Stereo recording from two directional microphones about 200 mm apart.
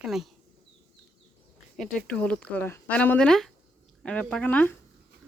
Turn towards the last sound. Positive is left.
turn(degrees=10)  # may be behind; listen again after turning